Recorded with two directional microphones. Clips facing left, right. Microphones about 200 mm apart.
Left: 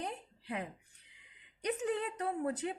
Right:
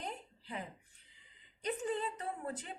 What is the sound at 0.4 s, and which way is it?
A woman's voice, 70° left (ahead or behind).